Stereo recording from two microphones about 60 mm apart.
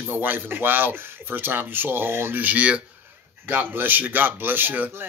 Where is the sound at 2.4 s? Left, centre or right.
Right.